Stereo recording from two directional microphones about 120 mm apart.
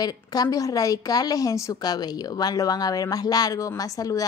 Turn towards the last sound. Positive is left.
turn(degrees=30)  # may be behind; listen again after turning